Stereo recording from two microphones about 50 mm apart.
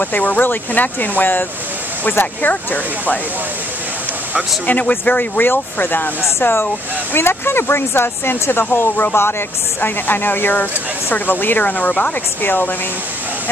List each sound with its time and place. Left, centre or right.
0.0 s speech: left
4.6 s speech: left
5.4 s speech: left
7.2 s speech: left